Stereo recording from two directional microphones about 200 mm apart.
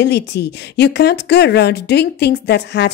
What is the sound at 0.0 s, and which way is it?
A woman's voice, 60° left (ahead or behind).